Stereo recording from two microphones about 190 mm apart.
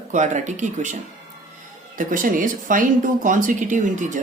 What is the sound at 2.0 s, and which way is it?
Speech, 45° right (ahead or behind).